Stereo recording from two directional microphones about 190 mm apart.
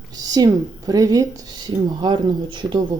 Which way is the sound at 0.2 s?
20° right (ahead or behind).